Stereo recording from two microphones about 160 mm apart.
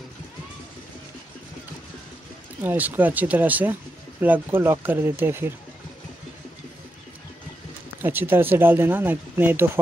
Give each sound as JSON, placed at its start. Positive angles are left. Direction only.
{"t": 2.6, "sound": "speech", "side_deg": -10}
{"t": 8.0, "sound": "speech", "side_deg": -15}